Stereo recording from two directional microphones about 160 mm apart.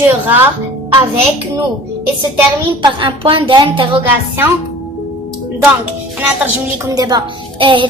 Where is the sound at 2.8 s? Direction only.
30° right (ahead or behind).